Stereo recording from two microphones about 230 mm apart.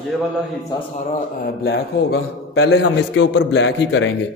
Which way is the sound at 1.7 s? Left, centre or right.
Left.